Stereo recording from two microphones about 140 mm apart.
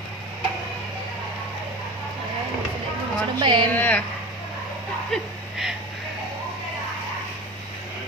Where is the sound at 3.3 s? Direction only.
30° right (ahead or behind).